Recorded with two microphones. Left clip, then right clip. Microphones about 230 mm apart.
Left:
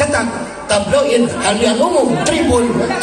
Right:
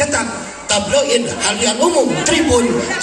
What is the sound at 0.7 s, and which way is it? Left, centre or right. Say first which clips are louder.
Speech: left 1 dB; right.